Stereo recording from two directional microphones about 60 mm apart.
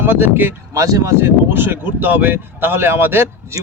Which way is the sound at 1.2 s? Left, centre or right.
Right.